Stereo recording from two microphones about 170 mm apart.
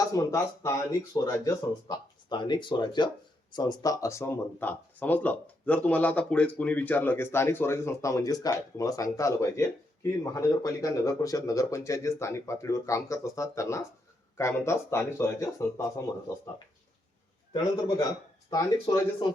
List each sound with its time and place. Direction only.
0.0 s speech: 20° left (ahead or behind)
17.5 s speech: 20° left (ahead or behind)